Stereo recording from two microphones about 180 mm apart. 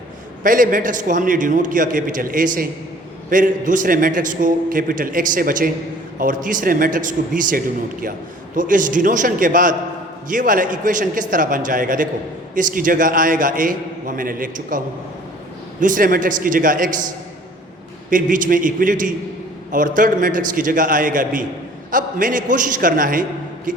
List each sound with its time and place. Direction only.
0.4 s a man's voice: 50° right (ahead or behind)
15.8 s a man's voice: 50° right (ahead or behind)
18.1 s a man's voice: 50° right (ahead or behind)